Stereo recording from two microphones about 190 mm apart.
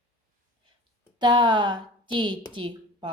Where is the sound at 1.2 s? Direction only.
25° right (ahead or behind).